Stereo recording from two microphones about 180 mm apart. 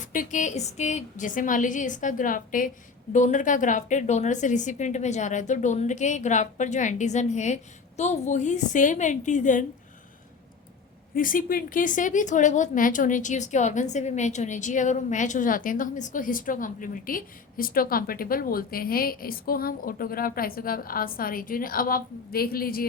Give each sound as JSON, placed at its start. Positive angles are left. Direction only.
{"t": 0.0, "sound": "a woman's voice", "side_deg": 45}
{"t": 11.1, "sound": "a woman's voice", "side_deg": 50}